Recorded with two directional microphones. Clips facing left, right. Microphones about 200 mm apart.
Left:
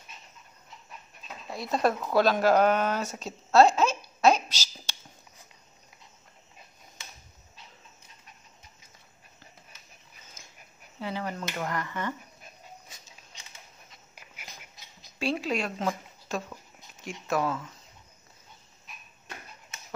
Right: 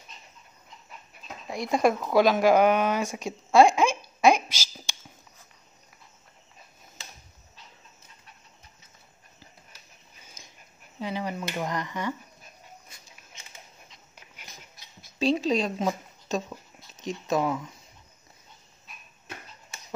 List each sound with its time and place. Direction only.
1.5 s speech: 15° right (ahead or behind)
10.2 s dog: 15° right (ahead or behind)
11.0 s a sound: 15° right (ahead or behind)
11.5 s finger snapping: 15° right (ahead or behind)
13.8 s dog: 5° left (ahead or behind)
15.1 s speech: 20° right (ahead or behind)